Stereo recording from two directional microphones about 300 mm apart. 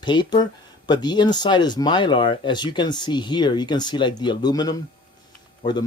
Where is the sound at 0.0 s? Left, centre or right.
Centre.